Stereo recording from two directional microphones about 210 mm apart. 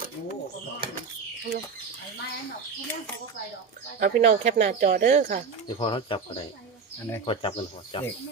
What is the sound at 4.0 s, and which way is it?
Speech, 40° right (ahead or behind).